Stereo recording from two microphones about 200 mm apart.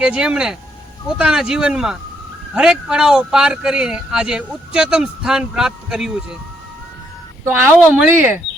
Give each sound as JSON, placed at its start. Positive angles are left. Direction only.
{"t": 0.0, "sound": "speech", "side_deg": -5}
{"t": 7.4, "sound": "speech", "side_deg": -10}